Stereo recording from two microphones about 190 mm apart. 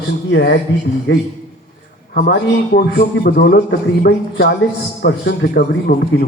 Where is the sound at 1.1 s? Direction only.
80° left.